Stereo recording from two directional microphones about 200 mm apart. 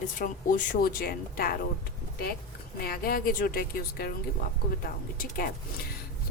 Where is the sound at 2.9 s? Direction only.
50° left (ahead or behind).